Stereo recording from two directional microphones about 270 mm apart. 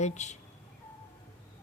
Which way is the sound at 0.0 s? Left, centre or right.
Left.